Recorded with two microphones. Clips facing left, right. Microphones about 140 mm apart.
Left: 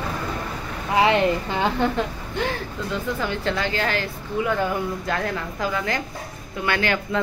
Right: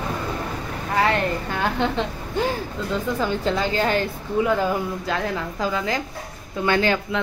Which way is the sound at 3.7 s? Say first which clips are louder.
Right 3 dB; 20° right (ahead or behind).